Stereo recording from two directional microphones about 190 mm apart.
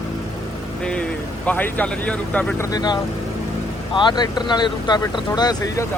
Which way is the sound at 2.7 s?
20° left (ahead or behind).